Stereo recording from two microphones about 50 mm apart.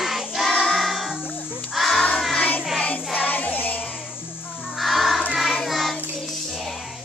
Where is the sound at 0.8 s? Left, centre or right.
Centre.